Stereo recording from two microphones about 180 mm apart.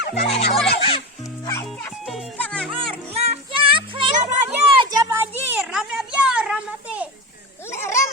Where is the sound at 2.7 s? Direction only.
30° right (ahead or behind).